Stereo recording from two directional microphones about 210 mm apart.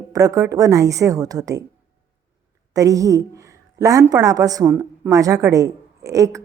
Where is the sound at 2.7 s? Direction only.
15° right (ahead or behind).